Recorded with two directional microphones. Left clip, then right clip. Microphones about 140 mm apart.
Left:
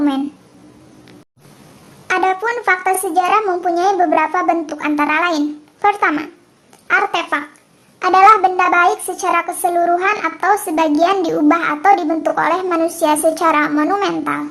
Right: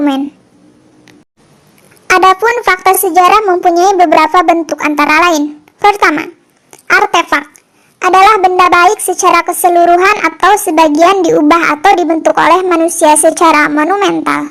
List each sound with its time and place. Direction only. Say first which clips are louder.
2.0 s a woman's voice: right 9 dB; 35° right (ahead or behind)